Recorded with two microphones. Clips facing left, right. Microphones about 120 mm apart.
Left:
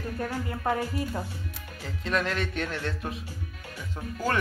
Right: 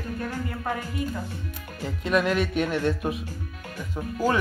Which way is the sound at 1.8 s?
15° right (ahead or behind).